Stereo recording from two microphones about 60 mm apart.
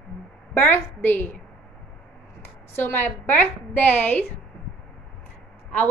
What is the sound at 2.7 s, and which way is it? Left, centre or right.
A woman's voice, left.